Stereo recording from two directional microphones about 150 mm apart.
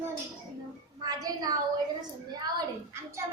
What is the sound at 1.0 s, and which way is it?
A child's voice, 25° right (ahead or behind).